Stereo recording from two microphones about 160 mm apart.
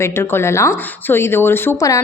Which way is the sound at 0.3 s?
15° left (ahead or behind).